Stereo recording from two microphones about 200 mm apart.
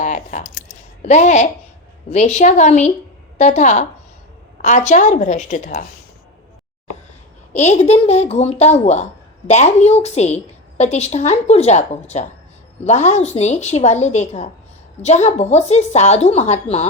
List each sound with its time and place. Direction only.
0.0 s a woman's voice: 40° left (ahead or behind)
7.5 s a woman's voice: 35° left (ahead or behind)